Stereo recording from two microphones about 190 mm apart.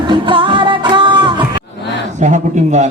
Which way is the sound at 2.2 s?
40° right (ahead or behind).